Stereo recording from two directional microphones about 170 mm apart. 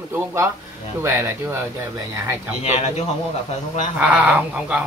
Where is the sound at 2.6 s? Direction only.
40° left (ahead or behind).